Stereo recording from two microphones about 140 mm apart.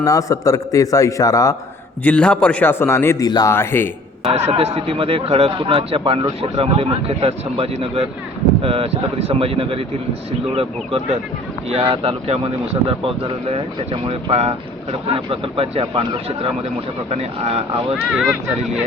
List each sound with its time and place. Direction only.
0.0 s a man's voice: 25° left (ahead or behind)
2.0 s a man's voice: 10° left (ahead or behind); by 3.5 s 25° left (ahead or behind)
3.5 s a man's voice: 15° left (ahead or behind)
4.3 s speech: 45° right (ahead or behind)
17.9 s speech: centre (ahead or behind)